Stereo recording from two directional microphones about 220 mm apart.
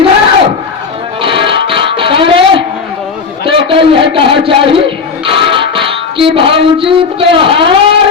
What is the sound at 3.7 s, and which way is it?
Speech, 25° right (ahead or behind).